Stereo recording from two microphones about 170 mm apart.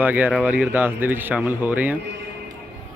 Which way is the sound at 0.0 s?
10° right (ahead or behind).